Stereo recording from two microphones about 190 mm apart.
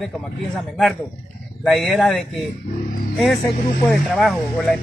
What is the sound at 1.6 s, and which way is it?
A man's voice, centre (ahead or behind).